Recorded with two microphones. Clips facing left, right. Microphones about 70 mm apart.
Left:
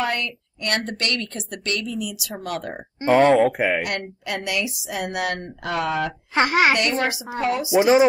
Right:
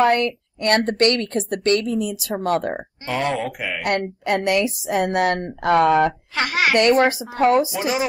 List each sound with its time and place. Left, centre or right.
0.0 s a woman's voice: right
3.1 s speech: left
3.8 s a woman's voice: right
6.3 s a woman's voice: left
6.9 s a woman's voice: right
7.7 s a woman's voice: left